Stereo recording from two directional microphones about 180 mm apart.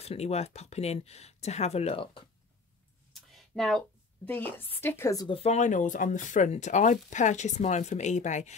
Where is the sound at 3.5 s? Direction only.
Centre (ahead or behind).